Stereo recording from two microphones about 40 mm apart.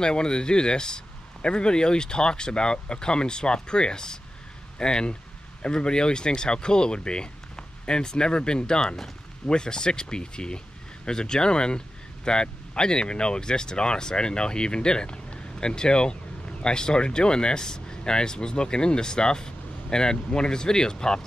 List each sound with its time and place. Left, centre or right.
0.0 s speech: left